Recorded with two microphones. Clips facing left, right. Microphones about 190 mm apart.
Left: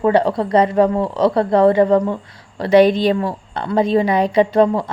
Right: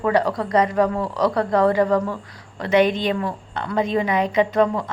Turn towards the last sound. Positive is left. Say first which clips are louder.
# left 5 dB
turn(degrees=30)  # may be behind; listen again after turning